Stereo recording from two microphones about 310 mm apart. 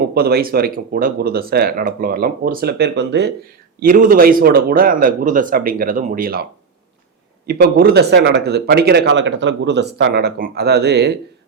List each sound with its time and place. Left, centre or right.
0.1 s speech: right